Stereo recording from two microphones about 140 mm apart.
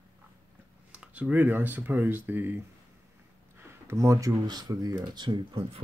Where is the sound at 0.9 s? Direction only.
10° right (ahead or behind).